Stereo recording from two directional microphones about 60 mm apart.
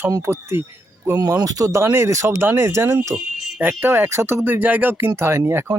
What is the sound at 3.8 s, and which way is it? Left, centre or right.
Speech, right.